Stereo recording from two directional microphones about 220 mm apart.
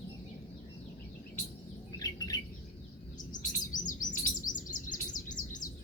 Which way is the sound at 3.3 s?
35° left (ahead or behind).